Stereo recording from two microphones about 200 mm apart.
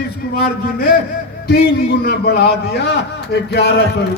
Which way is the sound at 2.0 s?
55° left (ahead or behind).